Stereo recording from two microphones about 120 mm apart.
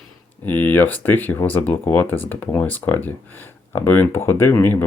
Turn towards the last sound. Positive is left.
turn(degrees=20)  # may be behind; listen again after turning